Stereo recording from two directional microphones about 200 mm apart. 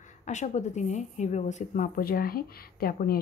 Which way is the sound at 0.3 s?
35° left (ahead or behind).